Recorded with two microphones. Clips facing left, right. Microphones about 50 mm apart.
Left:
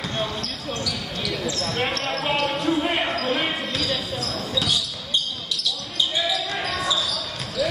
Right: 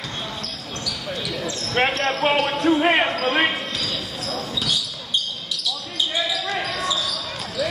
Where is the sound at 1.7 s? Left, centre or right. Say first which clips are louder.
Right 7 dB; right.